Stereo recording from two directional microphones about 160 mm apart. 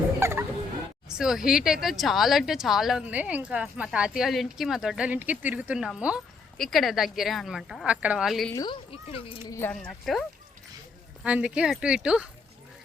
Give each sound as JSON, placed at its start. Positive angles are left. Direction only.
{"t": 0.2, "sound": "fowl", "side_deg": -15}
{"t": 1.0, "sound": "speech", "side_deg": -5}
{"t": 8.5, "sound": "speech", "side_deg": 30}
{"t": 9.5, "sound": "speech", "side_deg": 15}
{"t": 9.7, "sound": "speech", "side_deg": 0}